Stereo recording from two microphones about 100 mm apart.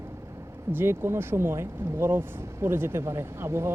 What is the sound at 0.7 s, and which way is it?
Speech, 25° right (ahead or behind).